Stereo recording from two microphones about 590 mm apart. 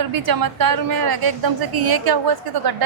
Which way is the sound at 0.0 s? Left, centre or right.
Right.